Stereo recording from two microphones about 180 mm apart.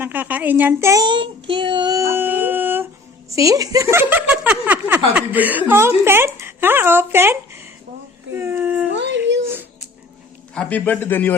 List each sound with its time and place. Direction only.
0.0 s child singing: 10° right (ahead or behind)
3.2 s speech: 15° right (ahead or behind)
8.9 s a sound: 80° right
10.5 s a man's voice: 5° left (ahead or behind)